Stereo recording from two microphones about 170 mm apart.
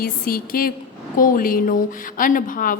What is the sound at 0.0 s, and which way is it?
A woman's voice, 60° left (ahead or behind).